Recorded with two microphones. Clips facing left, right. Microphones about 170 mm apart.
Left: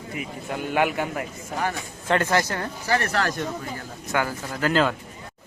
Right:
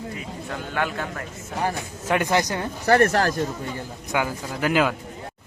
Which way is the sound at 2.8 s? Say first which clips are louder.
Right 7 dB; 55° right (ahead or behind).